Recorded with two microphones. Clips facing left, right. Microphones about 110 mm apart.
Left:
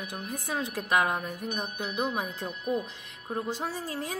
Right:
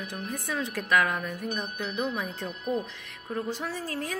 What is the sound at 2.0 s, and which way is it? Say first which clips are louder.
Speech: left 1 dB; 45° left (ahead or behind).